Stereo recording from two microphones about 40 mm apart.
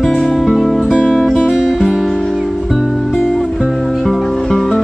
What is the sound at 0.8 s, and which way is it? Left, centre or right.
Music, centre.